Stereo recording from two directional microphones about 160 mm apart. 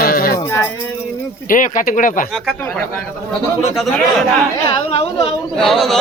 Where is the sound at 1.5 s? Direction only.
55° left (ahead or behind).